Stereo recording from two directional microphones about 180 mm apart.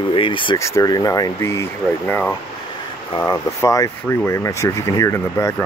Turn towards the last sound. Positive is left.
turn(degrees=15)  # may be behind; listen again after turning